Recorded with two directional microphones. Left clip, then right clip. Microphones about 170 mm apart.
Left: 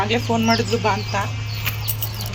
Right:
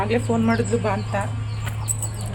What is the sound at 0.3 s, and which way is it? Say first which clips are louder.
Speech: left 3 dB; 10° right (ahead or behind).